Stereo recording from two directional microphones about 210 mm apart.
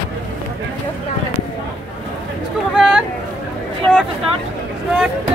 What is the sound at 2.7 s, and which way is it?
Speech, centre (ahead or behind).